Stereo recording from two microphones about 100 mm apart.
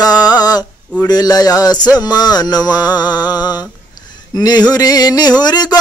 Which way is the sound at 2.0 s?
45° left (ahead or behind).